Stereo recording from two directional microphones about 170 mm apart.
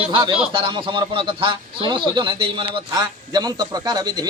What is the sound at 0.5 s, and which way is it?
A man's voice, 30° right (ahead or behind).